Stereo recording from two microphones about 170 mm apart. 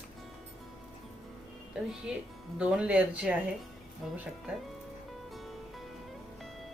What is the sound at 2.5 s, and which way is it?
Speech, 5° right (ahead or behind).